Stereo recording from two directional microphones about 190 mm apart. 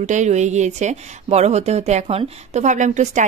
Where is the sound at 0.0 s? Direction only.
40° right (ahead or behind).